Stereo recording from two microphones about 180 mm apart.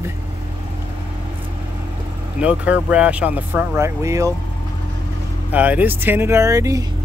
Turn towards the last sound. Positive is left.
turn(degrees=-20)  # may be behind; listen again after turning